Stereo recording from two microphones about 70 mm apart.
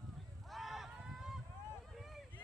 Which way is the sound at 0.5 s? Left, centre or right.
Centre.